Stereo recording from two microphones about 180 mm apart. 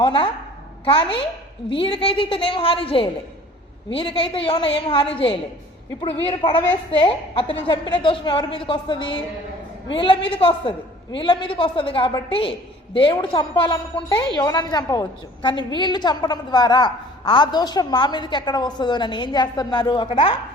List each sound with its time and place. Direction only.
0.0 s a woman's voice: 30° left (ahead or behind)